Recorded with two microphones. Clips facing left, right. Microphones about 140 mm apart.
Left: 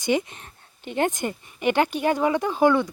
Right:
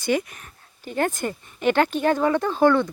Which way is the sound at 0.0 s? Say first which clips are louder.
Even; 20° left (ahead or behind).